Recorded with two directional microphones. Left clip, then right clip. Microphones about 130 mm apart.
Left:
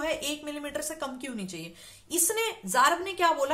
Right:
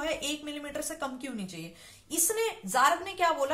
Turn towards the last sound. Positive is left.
turn(degrees=35)  # may be behind; listen again after turning